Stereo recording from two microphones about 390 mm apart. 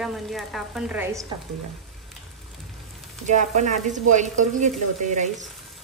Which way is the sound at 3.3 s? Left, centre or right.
Centre.